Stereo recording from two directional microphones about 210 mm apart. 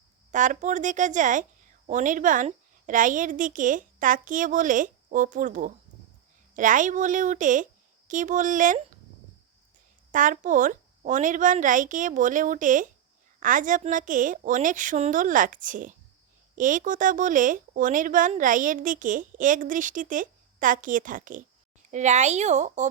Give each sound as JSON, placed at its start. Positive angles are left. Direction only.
{"t": 0.3, "sound": "speech", "side_deg": -35}
{"t": 10.1, "sound": "speech", "side_deg": -40}